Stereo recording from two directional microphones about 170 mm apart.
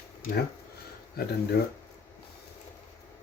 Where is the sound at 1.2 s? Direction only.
65° left (ahead or behind).